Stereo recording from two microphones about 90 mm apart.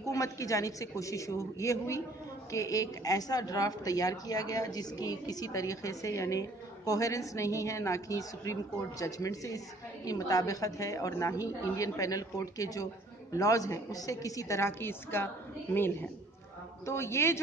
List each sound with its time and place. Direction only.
0.0 s a woman's voice: 40° left (ahead or behind)